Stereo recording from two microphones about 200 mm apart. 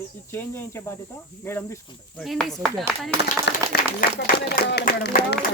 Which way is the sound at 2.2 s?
Centre (ahead or behind).